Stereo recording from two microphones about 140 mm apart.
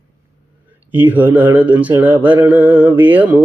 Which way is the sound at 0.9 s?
15° right (ahead or behind).